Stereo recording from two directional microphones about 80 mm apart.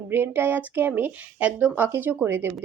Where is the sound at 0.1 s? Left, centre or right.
Right.